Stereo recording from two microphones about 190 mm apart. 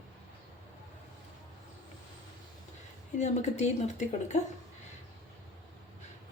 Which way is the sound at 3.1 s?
40° left (ahead or behind).